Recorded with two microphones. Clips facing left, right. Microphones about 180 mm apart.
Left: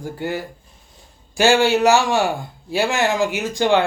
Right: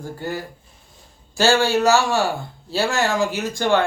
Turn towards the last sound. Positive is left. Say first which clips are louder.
# left 2 dB
turn(degrees=15)  # may be behind; listen again after turning